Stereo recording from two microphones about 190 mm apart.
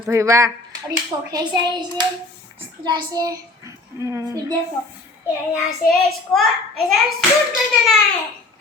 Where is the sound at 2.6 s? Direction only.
25° right (ahead or behind).